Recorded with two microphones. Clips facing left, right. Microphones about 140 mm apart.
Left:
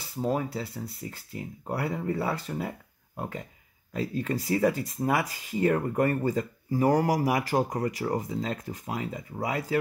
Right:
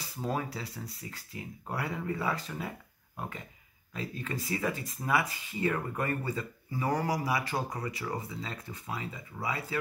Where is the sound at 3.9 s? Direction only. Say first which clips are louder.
Left 8 dB; 40° left (ahead or behind).